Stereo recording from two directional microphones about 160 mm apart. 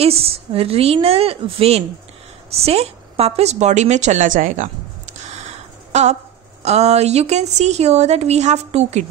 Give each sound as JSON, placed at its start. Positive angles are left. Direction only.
{"t": 0.0, "sound": "a woman's voice", "side_deg": -40}
{"t": 5.3, "sound": "a sound", "side_deg": -45}
{"t": 6.6, "sound": "a woman's voice", "side_deg": -45}